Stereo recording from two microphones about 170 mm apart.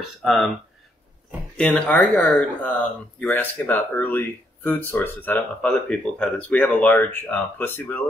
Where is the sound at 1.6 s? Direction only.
5° left (ahead or behind).